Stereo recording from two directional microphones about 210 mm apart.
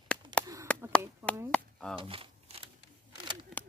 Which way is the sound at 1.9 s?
25° right (ahead or behind).